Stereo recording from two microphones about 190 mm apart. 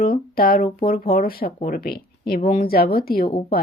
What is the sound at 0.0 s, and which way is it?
Speech, 50° left (ahead or behind).